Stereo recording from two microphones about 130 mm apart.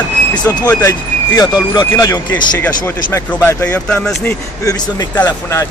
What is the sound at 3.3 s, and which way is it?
Speech, 15° left (ahead or behind).